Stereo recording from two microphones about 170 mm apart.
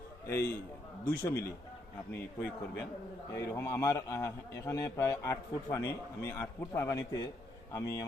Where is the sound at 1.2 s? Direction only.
15° left (ahead or behind).